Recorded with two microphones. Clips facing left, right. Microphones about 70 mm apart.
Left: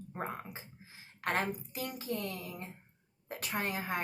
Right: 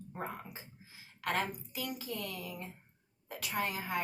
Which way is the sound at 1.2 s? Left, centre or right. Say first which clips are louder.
Left 1 dB; left.